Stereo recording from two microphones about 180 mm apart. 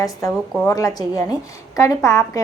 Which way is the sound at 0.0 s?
20° left (ahead or behind).